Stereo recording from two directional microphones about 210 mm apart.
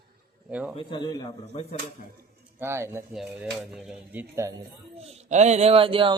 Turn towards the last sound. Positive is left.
turn(degrees=-25)  # may be behind; listen again after turning